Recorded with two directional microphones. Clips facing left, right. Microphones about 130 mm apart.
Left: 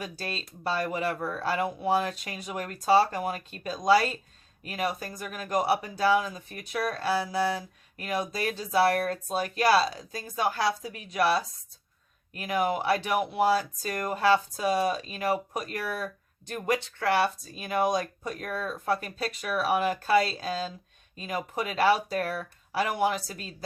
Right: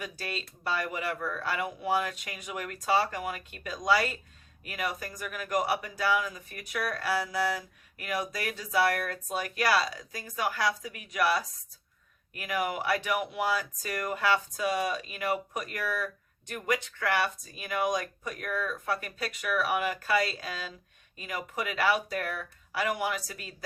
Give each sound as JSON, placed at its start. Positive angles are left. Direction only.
{"t": 0.0, "sound": "speech", "side_deg": 30}